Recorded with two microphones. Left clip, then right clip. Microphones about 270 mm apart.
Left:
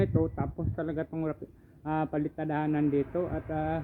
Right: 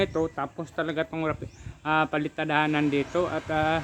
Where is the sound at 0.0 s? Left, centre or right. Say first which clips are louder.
Right 3 dB; centre.